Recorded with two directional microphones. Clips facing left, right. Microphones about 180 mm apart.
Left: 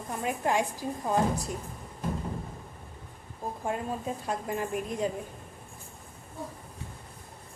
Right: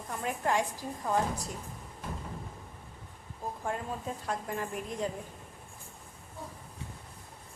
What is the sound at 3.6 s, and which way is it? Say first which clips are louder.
A woman's voice: left 4 dB; 20° left (ahead or behind).